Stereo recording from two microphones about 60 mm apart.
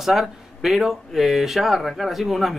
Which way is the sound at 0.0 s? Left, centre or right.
Centre.